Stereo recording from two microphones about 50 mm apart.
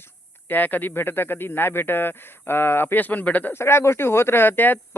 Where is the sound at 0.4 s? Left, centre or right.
Left.